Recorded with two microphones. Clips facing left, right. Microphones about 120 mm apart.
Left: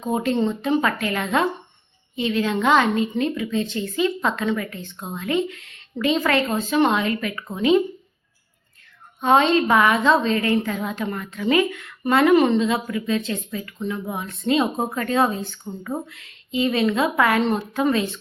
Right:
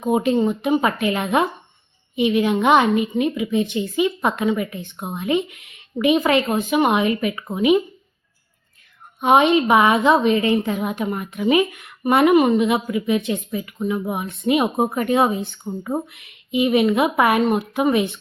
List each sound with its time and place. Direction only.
0.0 s a woman's voice: 15° right (ahead or behind)
9.2 s a woman's voice: 15° right (ahead or behind)